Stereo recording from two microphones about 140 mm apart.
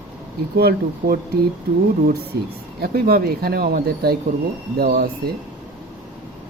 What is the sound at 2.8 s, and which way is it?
Speech, 90° right.